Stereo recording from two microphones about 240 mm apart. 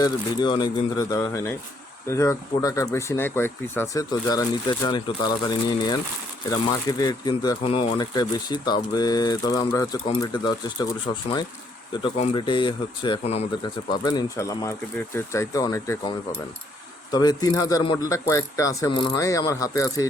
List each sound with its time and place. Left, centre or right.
0.0 s speech: centre